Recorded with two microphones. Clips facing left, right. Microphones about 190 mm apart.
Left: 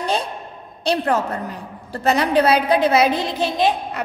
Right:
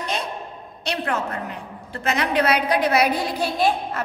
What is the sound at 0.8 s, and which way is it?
A woman's voice, 35° left (ahead or behind).